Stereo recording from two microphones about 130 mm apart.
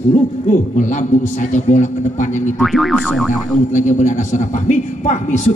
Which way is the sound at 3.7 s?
70° left (ahead or behind).